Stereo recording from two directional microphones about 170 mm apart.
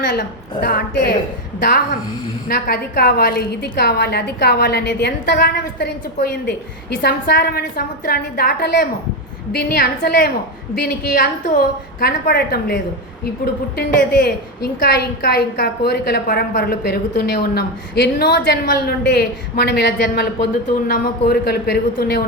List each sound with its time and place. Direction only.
0.6 s a woman's voice: 65° left (ahead or behind)
7.0 s a woman's voice: 70° left (ahead or behind)